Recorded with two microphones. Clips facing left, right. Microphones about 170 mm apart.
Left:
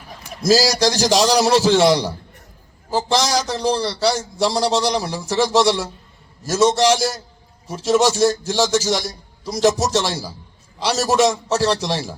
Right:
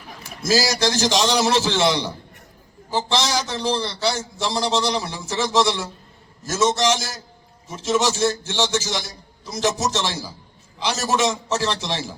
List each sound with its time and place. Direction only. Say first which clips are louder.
0.4 s a man's voice: left 4 dB; 35° left (ahead or behind)